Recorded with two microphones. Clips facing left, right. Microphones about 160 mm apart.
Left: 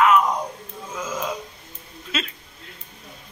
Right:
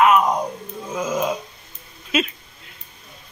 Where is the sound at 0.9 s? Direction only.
20° right (ahead or behind).